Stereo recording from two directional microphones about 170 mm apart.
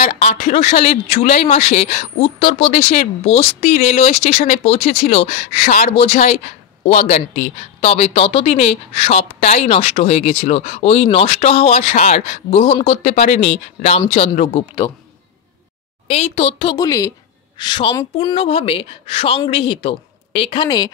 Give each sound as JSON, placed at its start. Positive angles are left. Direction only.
{"t": 0.0, "sound": "speech", "side_deg": 40}
{"t": 16.1, "sound": "a woman's voice", "side_deg": 40}
{"t": 18.3, "sound": "speech", "side_deg": 35}